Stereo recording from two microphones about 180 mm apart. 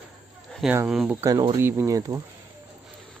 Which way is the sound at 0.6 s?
5° right (ahead or behind).